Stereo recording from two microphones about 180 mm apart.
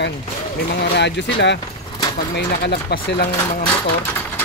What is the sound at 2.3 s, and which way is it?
Speech, 65° left (ahead or behind).